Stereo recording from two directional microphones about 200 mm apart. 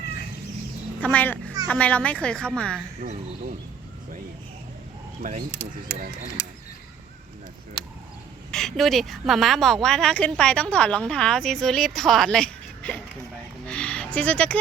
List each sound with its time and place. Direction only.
1.0 s a child's voice: 10° left (ahead or behind)
5.2 s speech: 40° right (ahead or behind)
8.4 s a woman's voice: centre (ahead or behind)
13.7 s a sound: 5° left (ahead or behind)